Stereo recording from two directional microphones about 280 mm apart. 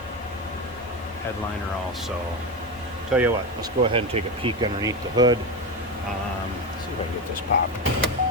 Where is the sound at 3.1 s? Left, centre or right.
Centre.